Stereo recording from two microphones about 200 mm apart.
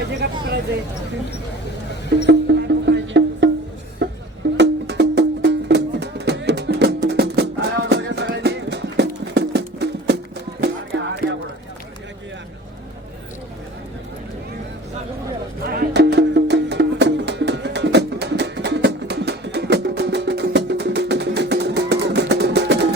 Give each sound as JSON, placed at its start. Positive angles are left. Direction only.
{"t": 2.2, "sound": "music", "side_deg": -60}
{"t": 15.7, "sound": "music", "side_deg": -55}